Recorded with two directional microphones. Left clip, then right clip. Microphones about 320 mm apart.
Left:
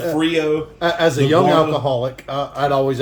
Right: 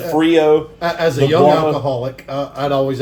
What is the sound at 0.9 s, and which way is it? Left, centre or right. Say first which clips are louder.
Speech: even; left.